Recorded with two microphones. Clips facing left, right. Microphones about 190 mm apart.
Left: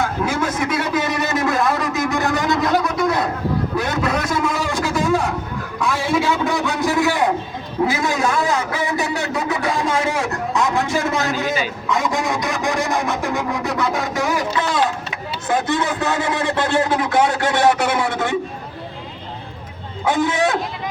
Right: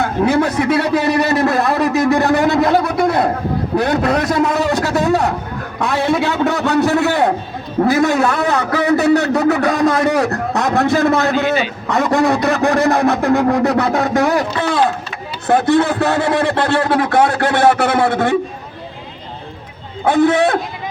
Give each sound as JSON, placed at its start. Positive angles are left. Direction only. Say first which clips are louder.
{"t": 0.0, "sound": "a sound", "louder": "right 6 dB", "side_deg": -65}
{"t": 5.8, "sound": "a man's voice", "louder": "right 3 dB", "side_deg": -65}
{"t": 20.1, "sound": "speech", "louder": "right 7 dB", "side_deg": -60}